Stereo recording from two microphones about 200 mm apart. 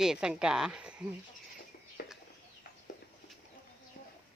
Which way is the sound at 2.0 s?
50° left (ahead or behind).